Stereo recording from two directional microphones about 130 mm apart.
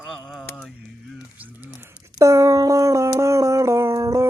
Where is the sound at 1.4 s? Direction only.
15° right (ahead or behind).